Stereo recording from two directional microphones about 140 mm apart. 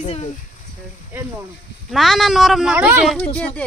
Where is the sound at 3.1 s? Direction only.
10° left (ahead or behind).